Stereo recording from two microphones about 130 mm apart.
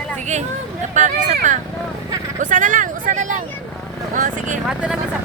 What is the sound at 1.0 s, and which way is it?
Speech, 70° right (ahead or behind).